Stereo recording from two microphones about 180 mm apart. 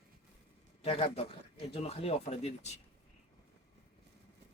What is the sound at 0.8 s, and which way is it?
Speech, 30° left (ahead or behind).